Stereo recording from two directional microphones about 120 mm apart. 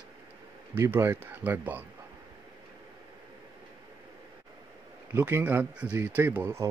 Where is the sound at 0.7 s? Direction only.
20° right (ahead or behind).